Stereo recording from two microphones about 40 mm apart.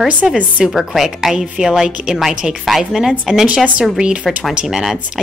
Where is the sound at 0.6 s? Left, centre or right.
Centre.